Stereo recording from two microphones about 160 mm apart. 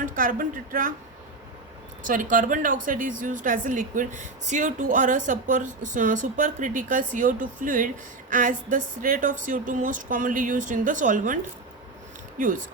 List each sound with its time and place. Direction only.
0.0 s a woman's voice: 60° right (ahead or behind)
2.0 s a woman's voice: 55° right (ahead or behind)